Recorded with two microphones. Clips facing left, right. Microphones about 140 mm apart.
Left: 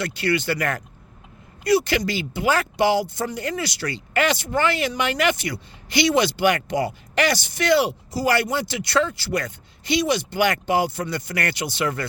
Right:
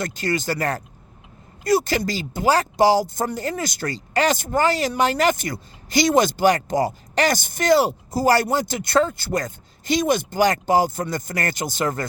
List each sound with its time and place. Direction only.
0.0 s speech: 45° right (ahead or behind)